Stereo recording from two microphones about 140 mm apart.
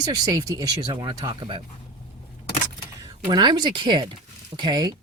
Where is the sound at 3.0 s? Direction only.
30° right (ahead or behind).